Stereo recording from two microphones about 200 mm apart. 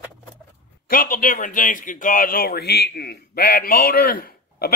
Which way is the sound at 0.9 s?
45° left (ahead or behind).